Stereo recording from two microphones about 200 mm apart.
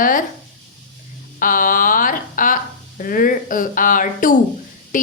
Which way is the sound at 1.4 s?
45° left (ahead or behind).